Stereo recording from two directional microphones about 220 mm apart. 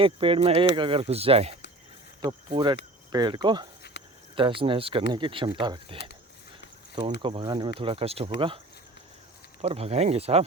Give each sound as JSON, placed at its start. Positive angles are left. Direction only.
{"t": 0.0, "sound": "speech", "side_deg": -25}
{"t": 3.9, "sound": "cricket", "side_deg": 50}
{"t": 4.4, "sound": "speech", "side_deg": -25}
{"t": 7.2, "sound": "speech", "side_deg": -20}